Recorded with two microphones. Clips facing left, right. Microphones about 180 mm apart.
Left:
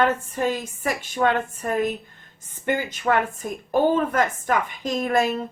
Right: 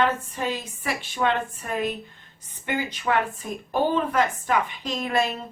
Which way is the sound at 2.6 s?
45° left (ahead or behind).